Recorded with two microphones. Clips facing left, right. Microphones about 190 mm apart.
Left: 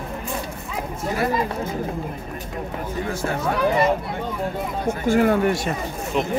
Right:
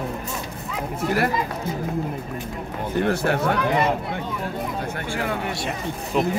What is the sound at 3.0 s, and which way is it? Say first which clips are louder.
Speech: right 5 dB; 70° right (ahead or behind).